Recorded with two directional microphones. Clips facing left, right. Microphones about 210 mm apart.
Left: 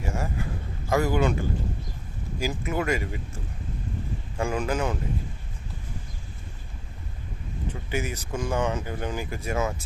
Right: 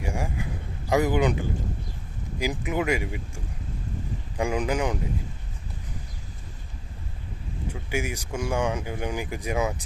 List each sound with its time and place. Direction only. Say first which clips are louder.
0.0 s a sound: even; 15° right (ahead or behind)
0.9 s speech: right 1 dB; 15° right (ahead or behind)
7.7 s speech: right 1 dB; 10° right (ahead or behind)